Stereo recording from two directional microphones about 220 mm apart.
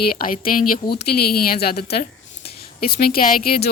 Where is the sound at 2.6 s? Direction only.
45° left (ahead or behind).